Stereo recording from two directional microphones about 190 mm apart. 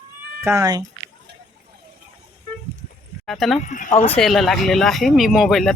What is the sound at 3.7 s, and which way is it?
Speech, 40° left (ahead or behind).